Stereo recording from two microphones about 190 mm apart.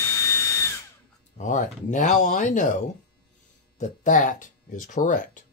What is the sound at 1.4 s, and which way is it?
Speech, 40° left (ahead or behind).